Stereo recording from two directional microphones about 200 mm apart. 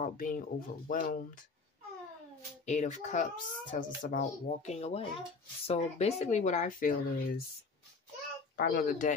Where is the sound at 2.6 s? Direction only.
35° left (ahead or behind).